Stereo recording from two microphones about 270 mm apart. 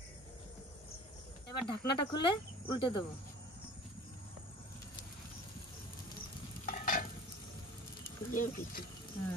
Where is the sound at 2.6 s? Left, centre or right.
Centre.